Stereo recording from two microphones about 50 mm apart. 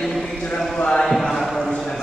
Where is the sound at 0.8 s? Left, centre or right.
Left.